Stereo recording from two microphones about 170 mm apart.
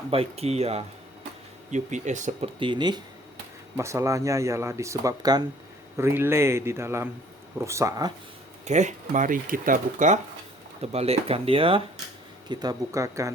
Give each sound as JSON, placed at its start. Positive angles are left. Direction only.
{"t": 0.1, "sound": "speech", "side_deg": -35}
{"t": 2.6, "sound": "speech", "side_deg": -25}
{"t": 8.6, "sound": "speech", "side_deg": -45}
{"t": 10.8, "sound": "speech", "side_deg": -35}
{"t": 12.5, "sound": "speech", "side_deg": -20}